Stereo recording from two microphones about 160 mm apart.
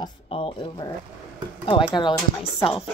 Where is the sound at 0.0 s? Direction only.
35° left (ahead or behind).